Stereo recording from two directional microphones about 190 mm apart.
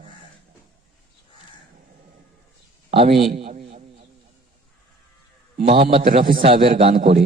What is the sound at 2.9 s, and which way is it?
Speech, 30° right (ahead or behind).